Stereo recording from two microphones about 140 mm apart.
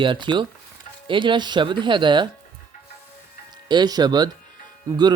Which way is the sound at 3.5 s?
30° right (ahead or behind).